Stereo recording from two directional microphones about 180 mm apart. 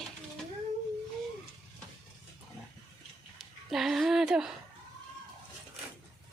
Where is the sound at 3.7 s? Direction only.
Centre (ahead or behind).